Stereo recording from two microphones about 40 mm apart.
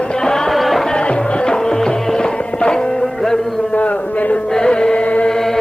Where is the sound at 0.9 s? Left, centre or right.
Left.